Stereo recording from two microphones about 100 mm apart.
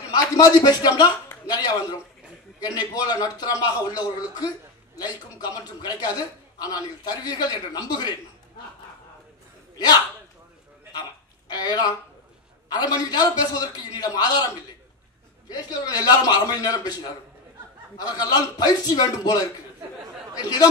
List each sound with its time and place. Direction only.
0.1 s a man's voice: 45° left (ahead or behind)
11.5 s a man's voice: 40° left (ahead or behind)
15.8 s a man's voice: 40° left (ahead or behind)